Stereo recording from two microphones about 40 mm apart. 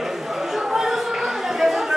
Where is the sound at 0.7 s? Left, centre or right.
Centre.